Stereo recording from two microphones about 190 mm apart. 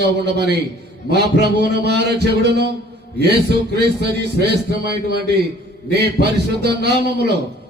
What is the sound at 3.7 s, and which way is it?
Speech, 60° right (ahead or behind).